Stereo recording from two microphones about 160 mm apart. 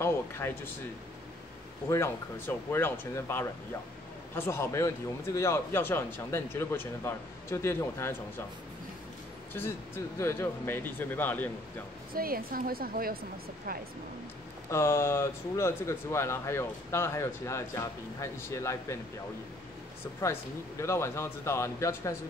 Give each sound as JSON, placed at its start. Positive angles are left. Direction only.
{"t": 0.0, "sound": "speech", "side_deg": 15}
{"t": 1.9, "sound": "speech", "side_deg": 15}
{"t": 9.5, "sound": "speech", "side_deg": 15}
{"t": 12.1, "sound": "speech", "side_deg": -65}
{"t": 14.7, "sound": "speech", "side_deg": 15}
{"t": 20.2, "sound": "speech", "side_deg": 15}